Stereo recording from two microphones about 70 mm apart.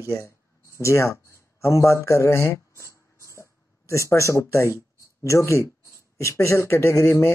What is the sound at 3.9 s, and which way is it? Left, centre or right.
Speech, left.